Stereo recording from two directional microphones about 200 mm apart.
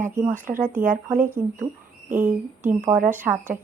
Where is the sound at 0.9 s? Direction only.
10° right (ahead or behind).